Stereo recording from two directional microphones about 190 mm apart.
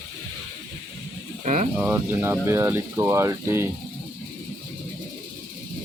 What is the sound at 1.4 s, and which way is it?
Speech, 40° right (ahead or behind).